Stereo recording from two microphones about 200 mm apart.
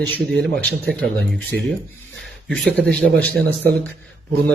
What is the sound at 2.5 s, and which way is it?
Speech, 5° left (ahead or behind).